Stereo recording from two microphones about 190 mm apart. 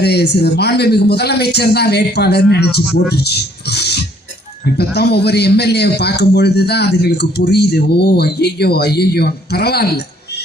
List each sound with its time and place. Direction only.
0.0 s a man's voice: 60° left (ahead or behind)